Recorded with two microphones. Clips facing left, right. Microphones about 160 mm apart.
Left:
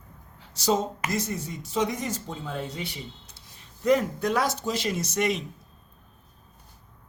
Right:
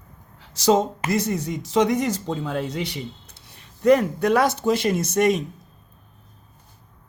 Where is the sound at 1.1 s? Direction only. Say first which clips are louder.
Right 10 dB; 70° right (ahead or behind); by 5.5 s 50° right (ahead or behind).